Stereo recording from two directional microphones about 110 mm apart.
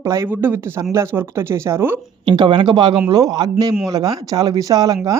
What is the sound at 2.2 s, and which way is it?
Speech, 45° right (ahead or behind).